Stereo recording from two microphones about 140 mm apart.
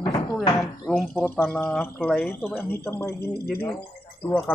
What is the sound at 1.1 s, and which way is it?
A man's voice, 15° left (ahead or behind).